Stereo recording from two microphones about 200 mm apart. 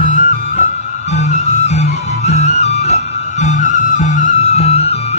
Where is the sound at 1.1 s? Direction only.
35° left (ahead or behind).